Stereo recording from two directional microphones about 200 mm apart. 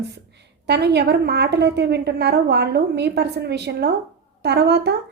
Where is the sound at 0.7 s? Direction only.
55° right (ahead or behind).